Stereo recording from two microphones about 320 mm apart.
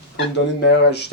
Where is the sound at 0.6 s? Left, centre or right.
Left.